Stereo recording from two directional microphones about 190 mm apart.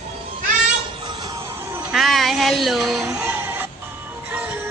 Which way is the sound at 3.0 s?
10° right (ahead or behind).